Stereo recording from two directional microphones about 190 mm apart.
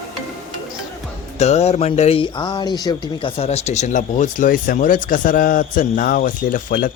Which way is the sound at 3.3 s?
35° left (ahead or behind).